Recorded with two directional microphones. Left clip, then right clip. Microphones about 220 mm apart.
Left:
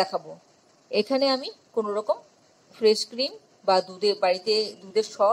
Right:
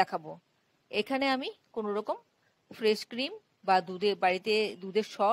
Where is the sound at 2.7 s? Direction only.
10° right (ahead or behind).